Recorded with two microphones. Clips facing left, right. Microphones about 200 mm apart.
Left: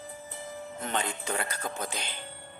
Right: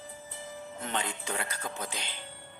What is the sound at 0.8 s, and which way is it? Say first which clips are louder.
Speech: left 2 dB; 45° left (ahead or behind).